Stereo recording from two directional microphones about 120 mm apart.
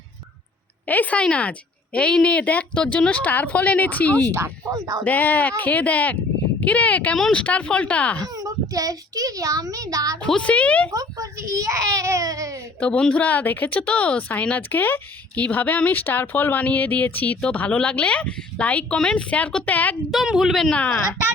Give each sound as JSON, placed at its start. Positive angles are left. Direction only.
{"t": 0.9, "sound": "speech", "side_deg": 15}
{"t": 4.3, "sound": "a child's voice", "side_deg": -20}
{"t": 5.0, "sound": "speech", "side_deg": 15}
{"t": 8.3, "sound": "a child's voice", "side_deg": -30}
{"t": 10.2, "sound": "speech", "side_deg": 10}
{"t": 10.9, "sound": "a child's voice", "side_deg": -25}
{"t": 12.8, "sound": "speech", "side_deg": 10}
{"t": 20.1, "sound": "speech", "side_deg": -5}